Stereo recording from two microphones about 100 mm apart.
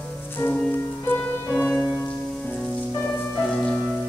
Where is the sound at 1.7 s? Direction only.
Centre (ahead or behind).